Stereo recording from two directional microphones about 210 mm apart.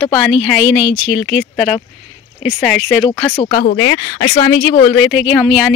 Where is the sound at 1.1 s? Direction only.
5° right (ahead or behind).